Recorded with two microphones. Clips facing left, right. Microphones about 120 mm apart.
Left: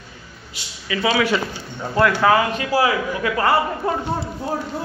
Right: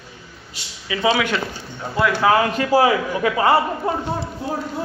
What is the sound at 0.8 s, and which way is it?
Speech, 15° right (ahead or behind).